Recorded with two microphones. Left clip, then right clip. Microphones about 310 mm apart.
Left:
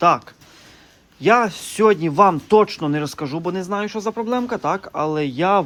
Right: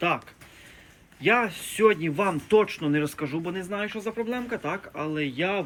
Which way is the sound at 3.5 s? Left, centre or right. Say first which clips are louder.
Left 7 dB; left.